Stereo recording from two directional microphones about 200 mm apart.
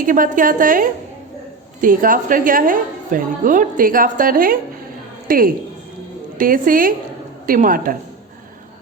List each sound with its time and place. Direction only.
0.0 s a woman's voice: 40° right (ahead or behind)